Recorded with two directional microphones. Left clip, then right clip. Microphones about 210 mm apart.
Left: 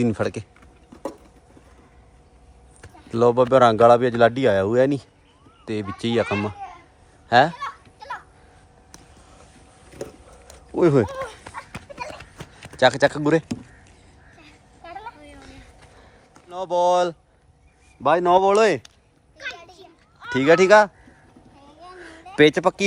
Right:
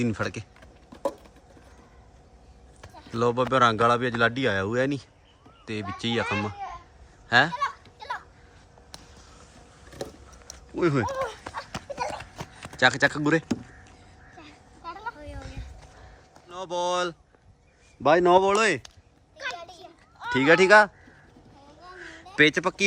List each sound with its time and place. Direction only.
0.0 s speech: centre (ahead or behind)
3.1 s speech: centre (ahead or behind)
7.3 s fowl: centre (ahead or behind)
10.8 s speech: 5° left (ahead or behind)
11.1 s dog: 50° right (ahead or behind)
11.5 s a sound: 50° right (ahead or behind)
12.7 s speech: 5° right (ahead or behind)
16.5 s speech: centre (ahead or behind)
18.2 s speech: 10° right (ahead or behind)
18.5 s speech: centre (ahead or behind)
20.3 s speech: 5° right (ahead or behind)
22.4 s speech: centre (ahead or behind)